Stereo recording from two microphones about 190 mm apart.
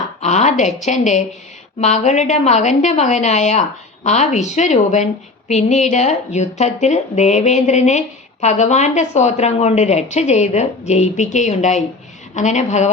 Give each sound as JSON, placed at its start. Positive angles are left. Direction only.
{"t": 0.2, "sound": "a woman's voice", "side_deg": 35}